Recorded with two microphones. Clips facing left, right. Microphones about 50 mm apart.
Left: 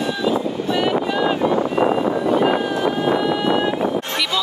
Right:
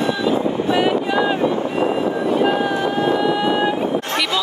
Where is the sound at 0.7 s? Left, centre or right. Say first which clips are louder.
Even; centre.